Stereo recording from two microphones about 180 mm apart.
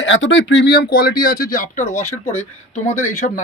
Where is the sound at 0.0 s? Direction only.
85° left; by 0.9 s 70° left (ahead or behind).